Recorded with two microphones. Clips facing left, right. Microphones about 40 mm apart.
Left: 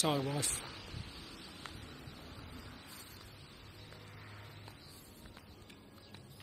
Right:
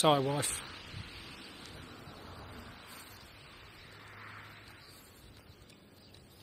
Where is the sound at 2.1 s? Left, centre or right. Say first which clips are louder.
Right 2 dB; right.